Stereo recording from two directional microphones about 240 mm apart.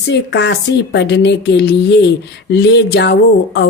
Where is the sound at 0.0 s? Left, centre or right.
Left.